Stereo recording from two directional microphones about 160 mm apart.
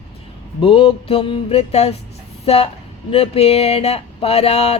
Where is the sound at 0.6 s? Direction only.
35° left (ahead or behind).